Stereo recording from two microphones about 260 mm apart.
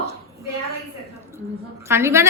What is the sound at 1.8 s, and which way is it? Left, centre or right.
Speech, centre.